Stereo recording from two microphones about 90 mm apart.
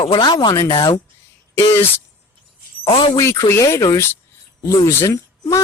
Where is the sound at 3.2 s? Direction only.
30° left (ahead or behind).